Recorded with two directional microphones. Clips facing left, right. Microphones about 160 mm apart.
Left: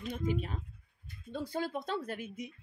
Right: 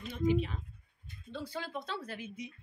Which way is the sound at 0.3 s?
45° left (ahead or behind).